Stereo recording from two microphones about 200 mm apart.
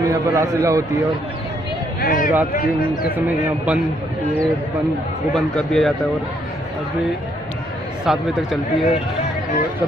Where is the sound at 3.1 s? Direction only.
10° right (ahead or behind).